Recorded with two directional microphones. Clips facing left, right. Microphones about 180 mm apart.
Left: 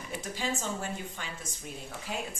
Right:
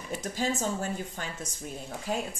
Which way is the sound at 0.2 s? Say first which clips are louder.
Right 5 dB; 45° right (ahead or behind).